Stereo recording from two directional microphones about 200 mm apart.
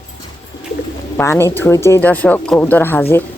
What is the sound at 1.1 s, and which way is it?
Speech, 10° left (ahead or behind).